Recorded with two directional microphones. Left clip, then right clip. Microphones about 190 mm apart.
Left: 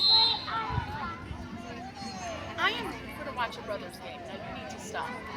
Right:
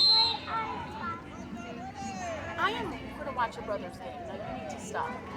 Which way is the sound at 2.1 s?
30° right (ahead or behind).